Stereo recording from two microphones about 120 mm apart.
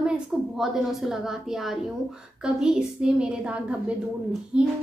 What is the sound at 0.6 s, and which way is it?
A woman's voice, 5° right (ahead or behind).